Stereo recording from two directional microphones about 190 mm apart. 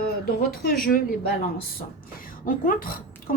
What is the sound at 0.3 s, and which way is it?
Speech, 50° left (ahead or behind).